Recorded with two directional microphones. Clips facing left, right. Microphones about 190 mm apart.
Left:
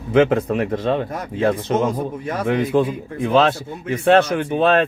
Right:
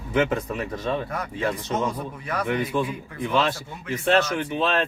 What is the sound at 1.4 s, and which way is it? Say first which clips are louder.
Speech: left 9 dB; 55° left (ahead or behind).